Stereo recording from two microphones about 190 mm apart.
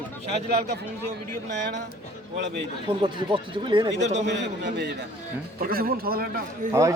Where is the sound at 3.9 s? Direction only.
40° right (ahead or behind).